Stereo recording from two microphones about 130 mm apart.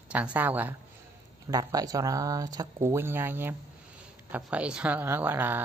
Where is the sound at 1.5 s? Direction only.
30° right (ahead or behind).